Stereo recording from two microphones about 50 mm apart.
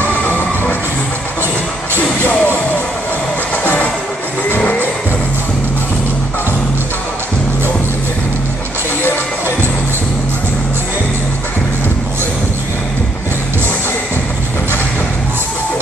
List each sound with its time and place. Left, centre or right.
0.0 s music: left
2.0 s music: left
3.6 s music: left